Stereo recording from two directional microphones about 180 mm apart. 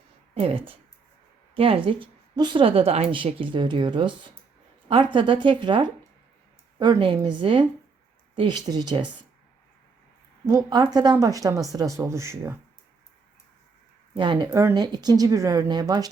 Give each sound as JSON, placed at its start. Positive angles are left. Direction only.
{"t": 0.3, "sound": "a woman's voice", "side_deg": -30}
{"t": 10.4, "sound": "a woman's voice", "side_deg": -20}
{"t": 14.1, "sound": "a woman's voice", "side_deg": -25}